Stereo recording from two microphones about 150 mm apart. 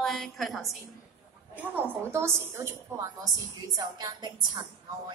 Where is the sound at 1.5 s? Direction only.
15° right (ahead or behind); by 4.6 s 30° right (ahead or behind).